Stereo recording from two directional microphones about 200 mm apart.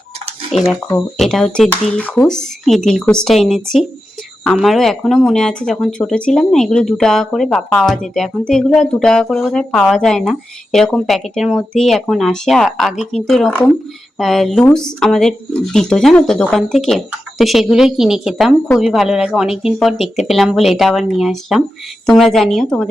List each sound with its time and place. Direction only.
1.2 s speech: centre (ahead or behind)